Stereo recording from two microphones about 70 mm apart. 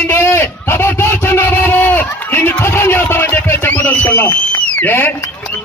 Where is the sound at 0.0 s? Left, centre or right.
Left.